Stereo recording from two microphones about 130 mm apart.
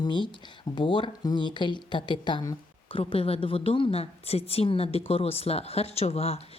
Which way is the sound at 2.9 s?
45° left (ahead or behind).